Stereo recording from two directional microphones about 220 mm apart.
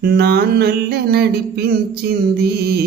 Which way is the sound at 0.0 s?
45° right (ahead or behind).